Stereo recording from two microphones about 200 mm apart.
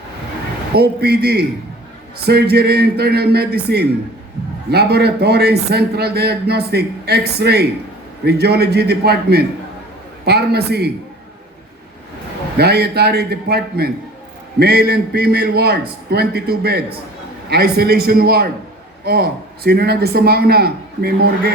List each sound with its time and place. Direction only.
0.7 s a man's voice: 55° right (ahead or behind)
12.5 s a man's voice: 55° right (ahead or behind)